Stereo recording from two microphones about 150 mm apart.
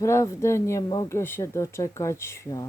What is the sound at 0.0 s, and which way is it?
Speech, 20° left (ahead or behind).